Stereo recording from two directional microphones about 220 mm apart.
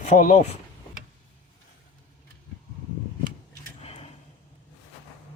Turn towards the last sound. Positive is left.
turn(degrees=25)  # may be behind; listen again after turning